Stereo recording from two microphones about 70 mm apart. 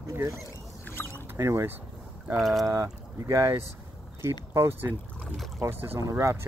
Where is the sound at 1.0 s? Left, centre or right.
Left.